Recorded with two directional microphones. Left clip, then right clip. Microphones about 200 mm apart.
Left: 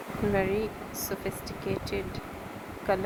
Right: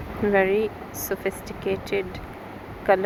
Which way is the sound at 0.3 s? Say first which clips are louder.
Right 9 dB; 20° right (ahead or behind).